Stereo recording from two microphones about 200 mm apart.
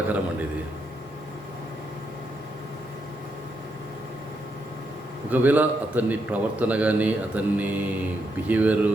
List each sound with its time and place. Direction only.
5.3 s a man's voice: 10° right (ahead or behind)